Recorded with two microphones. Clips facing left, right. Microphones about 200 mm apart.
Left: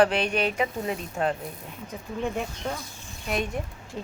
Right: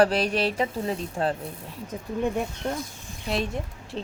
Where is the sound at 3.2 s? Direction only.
25° right (ahead or behind).